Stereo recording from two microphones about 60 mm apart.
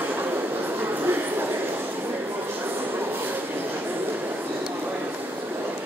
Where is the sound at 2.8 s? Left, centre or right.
Right.